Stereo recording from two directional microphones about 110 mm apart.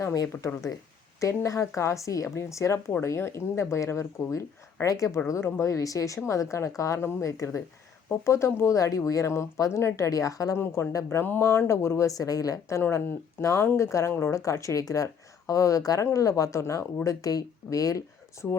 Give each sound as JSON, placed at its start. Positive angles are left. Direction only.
{"t": 0.0, "sound": "speech", "side_deg": 30}